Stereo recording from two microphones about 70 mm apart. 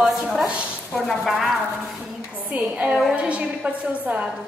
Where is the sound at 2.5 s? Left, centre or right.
Right.